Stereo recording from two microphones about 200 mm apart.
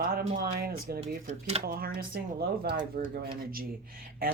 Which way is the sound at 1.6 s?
50° right (ahead or behind).